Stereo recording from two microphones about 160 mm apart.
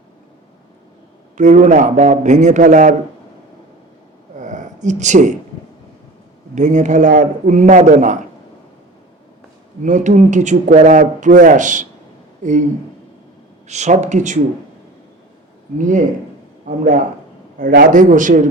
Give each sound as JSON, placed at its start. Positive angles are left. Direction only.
{"t": 1.4, "sound": "a man's voice", "side_deg": -50}
{"t": 4.4, "sound": "a sound", "side_deg": -50}
{"t": 6.5, "sound": "a man's voice", "side_deg": -50}
{"t": 9.8, "sound": "a man's voice", "side_deg": -50}
{"t": 13.7, "sound": "a man's voice", "side_deg": -45}
{"t": 15.8, "sound": "a man's voice", "side_deg": -50}
{"t": 17.6, "sound": "a man's voice", "side_deg": -65}